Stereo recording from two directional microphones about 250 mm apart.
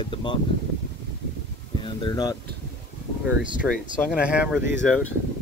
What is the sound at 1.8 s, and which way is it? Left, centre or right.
Speech, centre.